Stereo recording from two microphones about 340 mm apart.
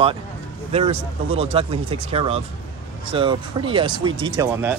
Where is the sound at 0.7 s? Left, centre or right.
Centre.